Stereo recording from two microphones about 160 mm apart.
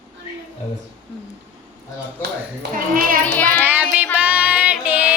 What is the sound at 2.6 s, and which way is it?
Speech, 90° right.